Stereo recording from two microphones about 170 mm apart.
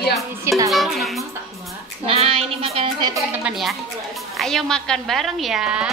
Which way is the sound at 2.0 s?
35° right (ahead or behind).